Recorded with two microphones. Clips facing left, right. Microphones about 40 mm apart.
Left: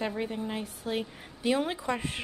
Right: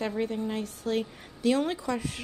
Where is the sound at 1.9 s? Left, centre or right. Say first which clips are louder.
Even; left.